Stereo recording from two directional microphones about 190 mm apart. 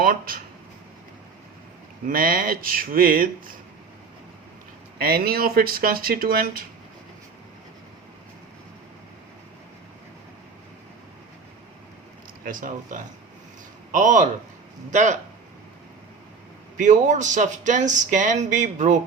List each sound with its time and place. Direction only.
0.0 s speech: 50° right (ahead or behind)
2.0 s speech: 50° right (ahead or behind)
4.9 s speech: 50° right (ahead or behind)
12.5 s speech: 45° right (ahead or behind)
16.7 s speech: 40° right (ahead or behind)